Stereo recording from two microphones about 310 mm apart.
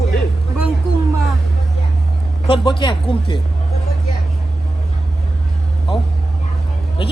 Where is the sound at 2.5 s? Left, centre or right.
Centre.